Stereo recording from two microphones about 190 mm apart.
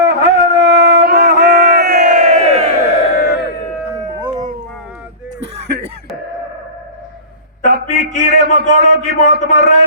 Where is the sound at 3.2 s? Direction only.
60° left (ahead or behind).